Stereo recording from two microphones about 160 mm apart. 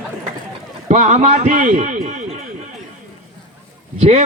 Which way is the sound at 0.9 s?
50° right (ahead or behind).